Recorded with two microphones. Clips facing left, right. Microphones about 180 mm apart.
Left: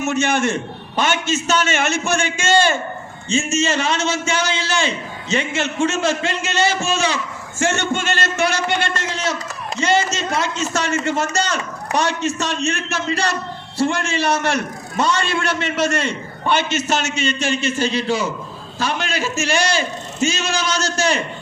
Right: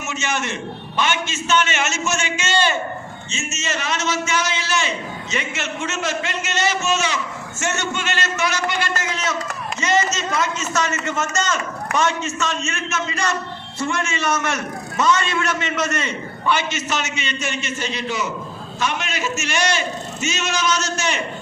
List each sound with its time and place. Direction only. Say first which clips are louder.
0.1 s a man's voice: left 6 dB; 55° left (ahead or behind)
3.2 s a man's voice: left 11 dB; 30° left (ahead or behind)